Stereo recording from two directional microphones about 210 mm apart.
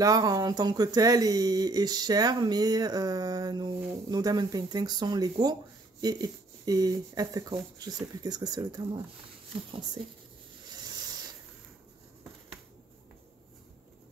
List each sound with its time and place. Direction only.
0.0 s speech: 15° right (ahead or behind)